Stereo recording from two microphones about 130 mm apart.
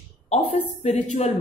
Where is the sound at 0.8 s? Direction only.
55° left (ahead or behind).